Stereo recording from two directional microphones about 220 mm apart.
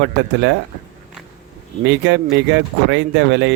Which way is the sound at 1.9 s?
55° right (ahead or behind).